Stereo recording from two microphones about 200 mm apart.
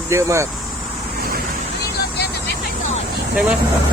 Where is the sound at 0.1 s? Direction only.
15° right (ahead or behind).